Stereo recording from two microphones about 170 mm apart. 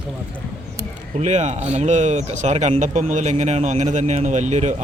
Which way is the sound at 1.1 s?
45° right (ahead or behind).